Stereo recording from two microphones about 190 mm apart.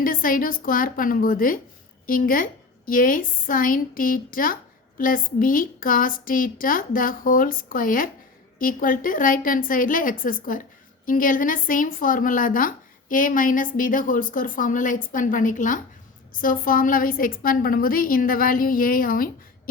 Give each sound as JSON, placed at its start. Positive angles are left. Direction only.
{"t": 0.0, "sound": "a woman's voice", "side_deg": 50}